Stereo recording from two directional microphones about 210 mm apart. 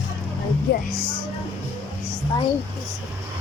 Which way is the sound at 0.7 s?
50° left (ahead or behind).